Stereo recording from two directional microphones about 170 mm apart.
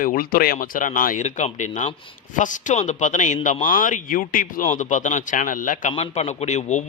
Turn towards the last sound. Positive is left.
turn(degrees=45)  # may be behind; listen again after turning